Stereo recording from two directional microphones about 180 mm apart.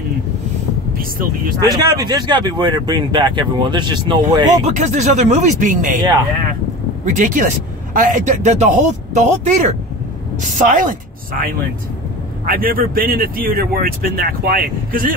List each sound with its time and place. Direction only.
0.9 s speech: 50° right (ahead or behind)
1.6 s speech: 20° right (ahead or behind)
4.6 s speech: 40° right (ahead or behind)
7.1 s a woman's voice: 45° right (ahead or behind)